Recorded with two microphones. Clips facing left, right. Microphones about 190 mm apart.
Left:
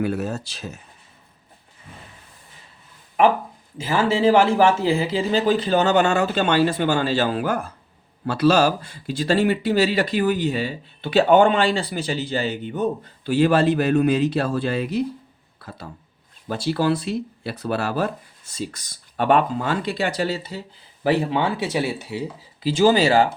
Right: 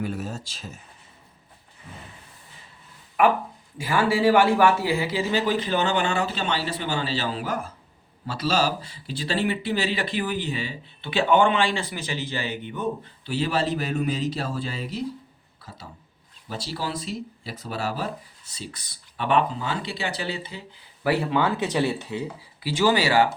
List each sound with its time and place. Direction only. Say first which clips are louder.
0.0 s speech: left 6 dB; 65° left (ahead or behind)
3.8 s speech: left 2 dB; 25° left (ahead or behind)
13.4 s speech: left 8 dB; 55° left (ahead or behind)
16.5 s speech: left 10 dB; 60° left (ahead or behind); by 20.7 s 40° left (ahead or behind)
21.0 s speech: left 2 dB; 25° left (ahead or behind)
21.6 s speech: even; 10° left (ahead or behind)
23.0 s speech: left 4 dB; 25° left (ahead or behind)